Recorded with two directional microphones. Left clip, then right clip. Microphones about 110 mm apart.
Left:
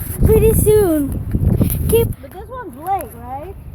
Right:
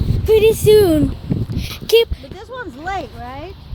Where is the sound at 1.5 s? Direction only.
20° right (ahead or behind).